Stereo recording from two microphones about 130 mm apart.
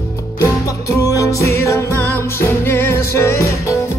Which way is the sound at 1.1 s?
25° left (ahead or behind).